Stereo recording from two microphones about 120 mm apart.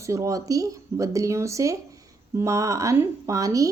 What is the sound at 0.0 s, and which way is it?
Speech, 25° right (ahead or behind).